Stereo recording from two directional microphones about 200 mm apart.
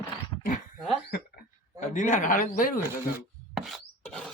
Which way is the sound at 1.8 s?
40° left (ahead or behind).